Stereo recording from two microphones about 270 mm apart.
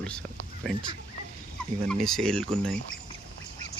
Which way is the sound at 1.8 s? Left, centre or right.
Centre.